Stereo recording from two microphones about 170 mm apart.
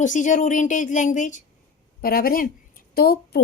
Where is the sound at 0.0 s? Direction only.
45° left (ahead or behind).